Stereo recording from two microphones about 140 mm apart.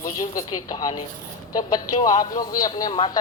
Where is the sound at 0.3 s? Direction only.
30° left (ahead or behind).